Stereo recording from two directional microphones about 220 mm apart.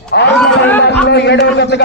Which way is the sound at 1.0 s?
50° left (ahead or behind).